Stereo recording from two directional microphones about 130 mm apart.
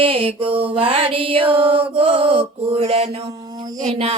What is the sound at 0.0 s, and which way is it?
Mantra, 45° right (ahead or behind).